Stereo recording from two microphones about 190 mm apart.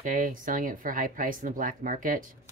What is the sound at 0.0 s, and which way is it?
Speech, 45° right (ahead or behind).